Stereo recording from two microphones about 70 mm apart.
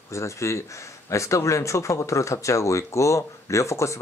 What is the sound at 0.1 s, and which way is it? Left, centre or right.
Speech, left.